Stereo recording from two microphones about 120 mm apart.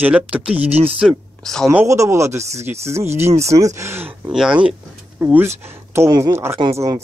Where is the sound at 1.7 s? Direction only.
25° right (ahead or behind).